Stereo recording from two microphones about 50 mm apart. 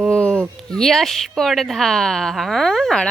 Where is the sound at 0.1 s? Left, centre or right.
Centre.